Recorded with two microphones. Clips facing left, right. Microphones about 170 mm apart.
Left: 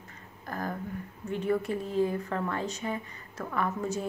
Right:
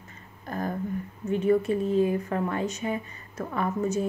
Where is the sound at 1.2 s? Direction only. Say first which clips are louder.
Right 6 dB; 20° right (ahead or behind).